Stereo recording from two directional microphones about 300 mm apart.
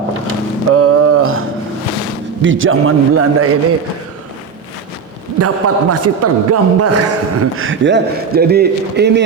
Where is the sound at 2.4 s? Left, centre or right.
Right.